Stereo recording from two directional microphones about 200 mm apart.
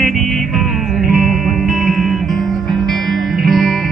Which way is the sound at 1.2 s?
Centre (ahead or behind).